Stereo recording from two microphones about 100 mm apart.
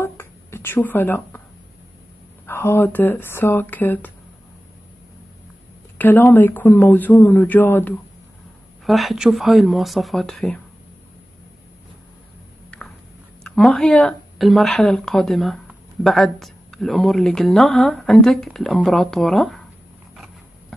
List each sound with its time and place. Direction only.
0.0 s a sound: 25° left (ahead or behind)
2.4 s speech: 25° left (ahead or behind)
5.9 s speech: 20° left (ahead or behind)
8.8 s a woman's voice: centre (ahead or behind)
13.4 s a woman's voice: 5° left (ahead or behind)